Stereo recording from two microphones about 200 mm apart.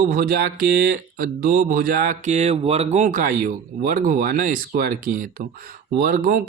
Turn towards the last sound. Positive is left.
turn(degrees=-45)  # may be behind; listen again after turning